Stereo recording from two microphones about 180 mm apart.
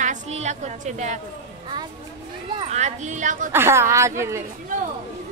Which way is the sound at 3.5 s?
15° right (ahead or behind).